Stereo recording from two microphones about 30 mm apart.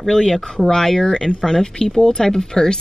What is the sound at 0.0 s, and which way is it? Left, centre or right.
Speech, centre.